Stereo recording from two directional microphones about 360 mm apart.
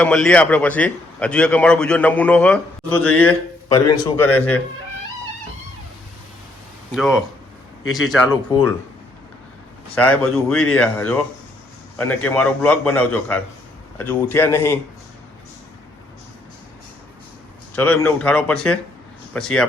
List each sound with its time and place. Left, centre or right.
0.0 s a man's voice: centre
4.3 s speech: left
6.9 s a man's voice: centre
8.4 s speech: centre
10.7 s a man's voice: centre
17.7 s a man's voice: centre